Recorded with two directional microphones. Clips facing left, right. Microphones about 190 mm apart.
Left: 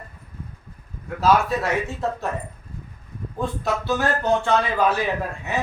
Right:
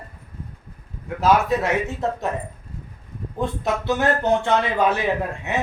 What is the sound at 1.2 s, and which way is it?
Speech, 20° right (ahead or behind).